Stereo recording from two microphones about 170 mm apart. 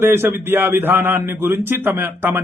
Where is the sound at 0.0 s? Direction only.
15° right (ahead or behind).